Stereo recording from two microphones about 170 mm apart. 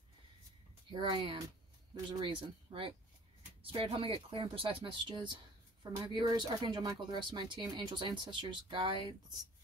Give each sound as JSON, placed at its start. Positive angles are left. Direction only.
{"t": 0.8, "sound": "speech", "side_deg": -25}